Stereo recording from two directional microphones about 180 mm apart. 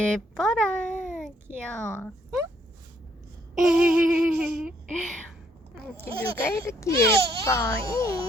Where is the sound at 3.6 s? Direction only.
10° right (ahead or behind).